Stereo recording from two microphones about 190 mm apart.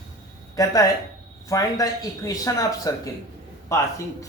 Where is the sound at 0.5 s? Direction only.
20° left (ahead or behind).